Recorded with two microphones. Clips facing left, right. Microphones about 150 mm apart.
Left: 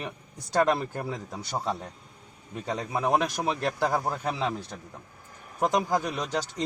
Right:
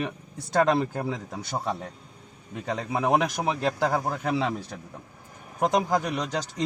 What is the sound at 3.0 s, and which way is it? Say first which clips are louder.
A man's voice: right 2 dB; 20° right (ahead or behind).